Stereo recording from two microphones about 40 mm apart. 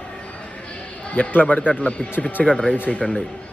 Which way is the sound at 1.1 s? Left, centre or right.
Left.